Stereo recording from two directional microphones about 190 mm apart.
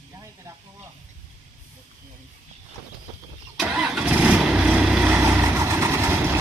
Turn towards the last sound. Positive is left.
turn(degrees=-10)  # may be behind; listen again after turning